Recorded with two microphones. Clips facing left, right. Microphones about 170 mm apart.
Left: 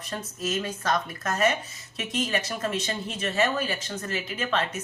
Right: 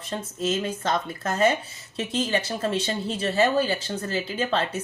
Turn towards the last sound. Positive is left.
turn(degrees=-30)  # may be behind; listen again after turning